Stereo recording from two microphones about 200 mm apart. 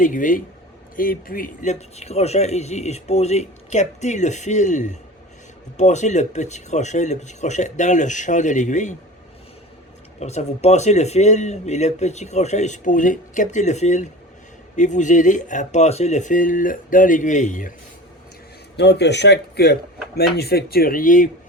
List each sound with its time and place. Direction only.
0.0 s speech: 40° left (ahead or behind)
10.2 s speech: 35° left (ahead or behind)
18.8 s speech: 60° left (ahead or behind); by 21.2 s 40° left (ahead or behind)